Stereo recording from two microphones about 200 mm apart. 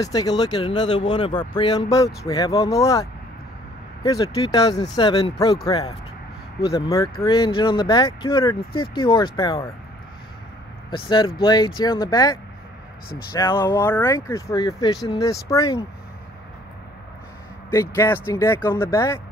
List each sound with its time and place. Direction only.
0.0 s speech: 20° left (ahead or behind)
6.7 s speech: 15° left (ahead or behind)
10.9 s speech: 25° left (ahead or behind)
17.6 s speech: 15° left (ahead or behind)